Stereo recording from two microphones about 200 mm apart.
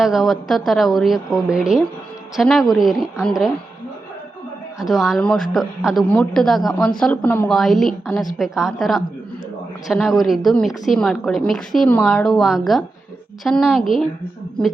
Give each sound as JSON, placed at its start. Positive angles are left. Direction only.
{"t": 0.0, "sound": "a woman's voice", "side_deg": 0}
{"t": 4.8, "sound": "a woman's voice", "side_deg": 0}